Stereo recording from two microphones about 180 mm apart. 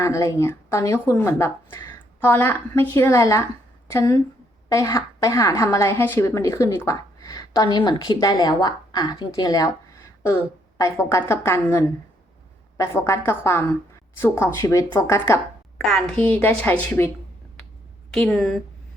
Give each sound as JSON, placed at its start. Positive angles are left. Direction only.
{"t": 0.0, "sound": "a woman's voice", "side_deg": 15}
{"t": 10.8, "sound": "speech", "side_deg": 15}
{"t": 15.8, "sound": "speech", "side_deg": 0}
{"t": 18.1, "sound": "speech", "side_deg": 5}